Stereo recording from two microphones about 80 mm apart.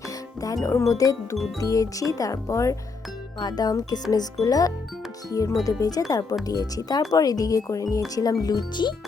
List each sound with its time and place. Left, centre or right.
0.4 s speech: left
3.3 s speech: left